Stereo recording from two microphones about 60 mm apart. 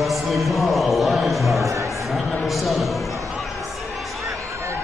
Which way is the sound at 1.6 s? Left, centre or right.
Right.